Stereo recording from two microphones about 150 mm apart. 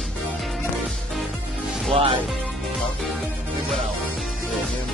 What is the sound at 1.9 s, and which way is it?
Speech, 35° right (ahead or behind).